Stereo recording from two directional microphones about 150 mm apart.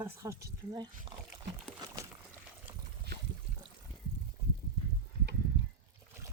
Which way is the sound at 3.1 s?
90° right.